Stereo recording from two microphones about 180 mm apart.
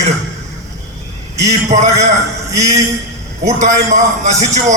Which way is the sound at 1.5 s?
40° right (ahead or behind).